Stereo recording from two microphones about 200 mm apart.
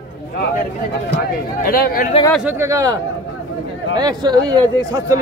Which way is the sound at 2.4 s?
15° right (ahead or behind).